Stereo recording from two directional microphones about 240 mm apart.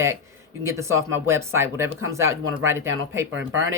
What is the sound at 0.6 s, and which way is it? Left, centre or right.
Speech, centre.